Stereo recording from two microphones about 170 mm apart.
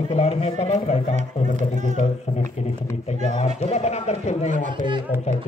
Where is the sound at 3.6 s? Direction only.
40° left (ahead or behind).